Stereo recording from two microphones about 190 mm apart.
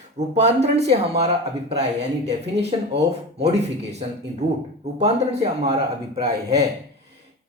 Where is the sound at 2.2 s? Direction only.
35° right (ahead or behind).